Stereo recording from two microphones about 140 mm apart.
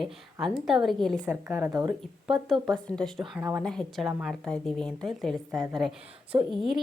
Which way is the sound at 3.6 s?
5° left (ahead or behind).